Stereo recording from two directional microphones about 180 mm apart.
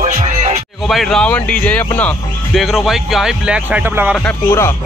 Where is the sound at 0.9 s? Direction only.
Centre (ahead or behind).